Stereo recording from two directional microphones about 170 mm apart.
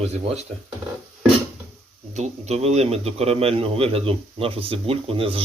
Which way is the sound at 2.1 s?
40° right (ahead or behind).